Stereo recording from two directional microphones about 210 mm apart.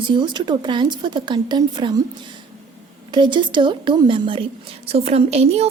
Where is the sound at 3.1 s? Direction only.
20° right (ahead or behind).